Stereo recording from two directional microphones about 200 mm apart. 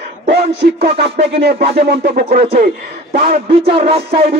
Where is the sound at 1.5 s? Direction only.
50° right (ahead or behind).